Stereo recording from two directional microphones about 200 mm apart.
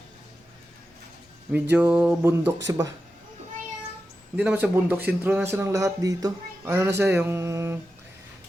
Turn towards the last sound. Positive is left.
turn(degrees=-15)  # may be behind; listen again after turning